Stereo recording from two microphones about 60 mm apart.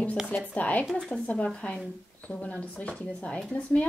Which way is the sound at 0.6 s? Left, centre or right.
Left.